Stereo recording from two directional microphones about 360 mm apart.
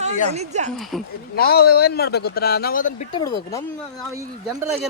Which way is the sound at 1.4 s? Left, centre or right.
Left.